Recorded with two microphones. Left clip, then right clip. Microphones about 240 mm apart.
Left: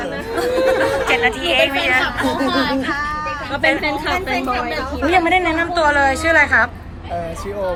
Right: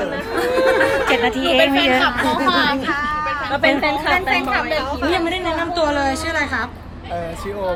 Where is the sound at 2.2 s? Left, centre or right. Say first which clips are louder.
Right 1 dB; centre.